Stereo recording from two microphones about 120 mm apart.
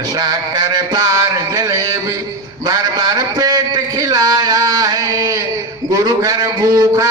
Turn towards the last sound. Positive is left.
turn(degrees=-30)  # may be behind; listen again after turning